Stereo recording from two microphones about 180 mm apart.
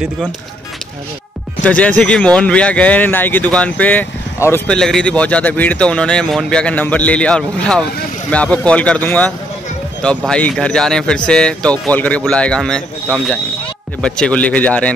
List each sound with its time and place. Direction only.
1.6 s speech: 5° left (ahead or behind)
4.7 s a man's voice: 5° left (ahead or behind)